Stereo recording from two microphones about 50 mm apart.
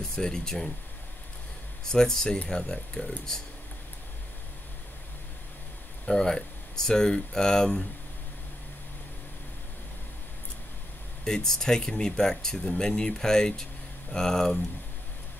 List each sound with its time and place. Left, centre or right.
0.1 s speech: centre
1.9 s speech: centre
6.0 s speech: centre
11.2 s speech: centre